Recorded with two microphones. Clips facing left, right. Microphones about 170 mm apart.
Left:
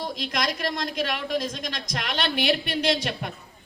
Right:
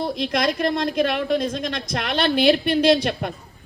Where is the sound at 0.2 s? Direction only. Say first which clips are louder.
Right 7 dB; 55° right (ahead or behind).